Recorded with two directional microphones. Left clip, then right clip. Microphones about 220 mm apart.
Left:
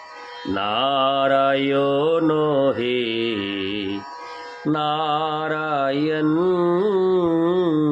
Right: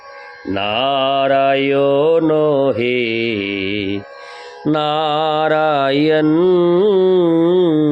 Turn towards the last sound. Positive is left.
turn(degrees=-25)  # may be behind; listen again after turning